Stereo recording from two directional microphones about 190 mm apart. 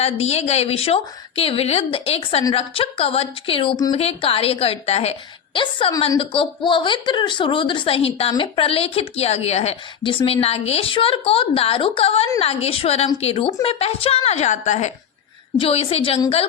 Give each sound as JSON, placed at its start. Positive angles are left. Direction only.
{"t": 0.0, "sound": "a woman's voice", "side_deg": 35}